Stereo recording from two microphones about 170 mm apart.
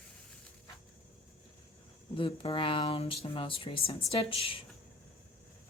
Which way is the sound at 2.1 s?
30° left (ahead or behind).